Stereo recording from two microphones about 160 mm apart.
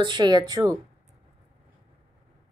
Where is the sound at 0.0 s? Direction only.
30° right (ahead or behind).